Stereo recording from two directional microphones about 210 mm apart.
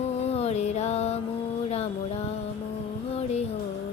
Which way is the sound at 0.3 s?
30° left (ahead or behind).